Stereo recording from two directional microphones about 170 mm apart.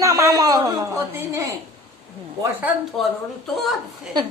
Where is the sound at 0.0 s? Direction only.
20° right (ahead or behind).